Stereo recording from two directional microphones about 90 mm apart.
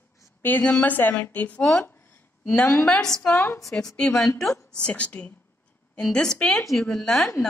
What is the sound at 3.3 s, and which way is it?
Speech, 30° left (ahead or behind).